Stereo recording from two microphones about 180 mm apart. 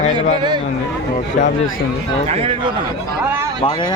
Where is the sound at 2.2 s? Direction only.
35° right (ahead or behind).